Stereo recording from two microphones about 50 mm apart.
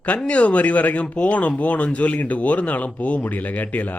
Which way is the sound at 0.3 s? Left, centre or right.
Left.